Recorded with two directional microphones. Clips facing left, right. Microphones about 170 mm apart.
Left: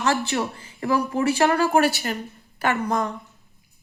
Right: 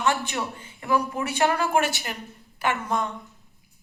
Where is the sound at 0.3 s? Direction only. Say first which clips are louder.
Left 4 dB; 35° left (ahead or behind).